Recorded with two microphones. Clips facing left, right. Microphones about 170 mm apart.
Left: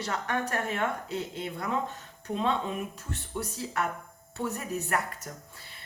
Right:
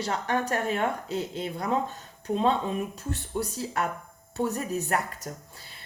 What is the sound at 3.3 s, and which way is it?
A woman's voice, 35° right (ahead or behind).